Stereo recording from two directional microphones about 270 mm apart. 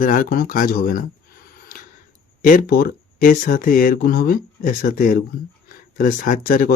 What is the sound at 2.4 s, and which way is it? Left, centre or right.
Speech, left.